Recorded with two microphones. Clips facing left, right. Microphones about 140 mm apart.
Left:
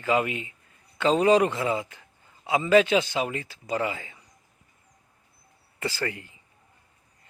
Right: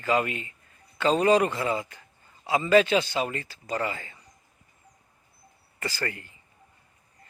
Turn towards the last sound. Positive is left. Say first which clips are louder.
# left 2 dB
turn(degrees=10)  # may be behind; listen again after turning